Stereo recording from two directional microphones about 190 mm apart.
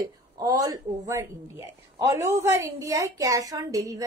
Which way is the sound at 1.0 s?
15° right (ahead or behind).